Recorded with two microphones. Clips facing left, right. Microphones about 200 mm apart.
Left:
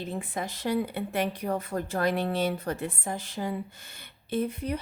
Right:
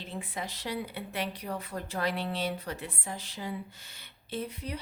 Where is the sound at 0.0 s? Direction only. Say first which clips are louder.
Left 5 dB; 45° left (ahead or behind).